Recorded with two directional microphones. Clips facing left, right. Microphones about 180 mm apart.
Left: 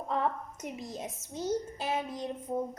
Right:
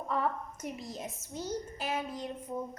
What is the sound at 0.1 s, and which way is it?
A child's voice, 20° left (ahead or behind).